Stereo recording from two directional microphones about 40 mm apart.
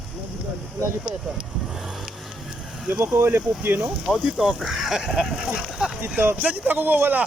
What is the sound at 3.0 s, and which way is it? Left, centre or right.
Speech, right.